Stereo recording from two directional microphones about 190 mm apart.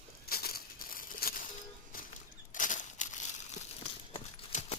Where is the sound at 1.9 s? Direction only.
50° left (ahead or behind).